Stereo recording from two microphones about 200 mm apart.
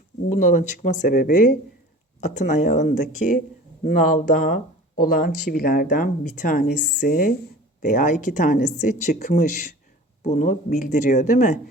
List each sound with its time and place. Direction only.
0.3 s speech: 40° left (ahead or behind)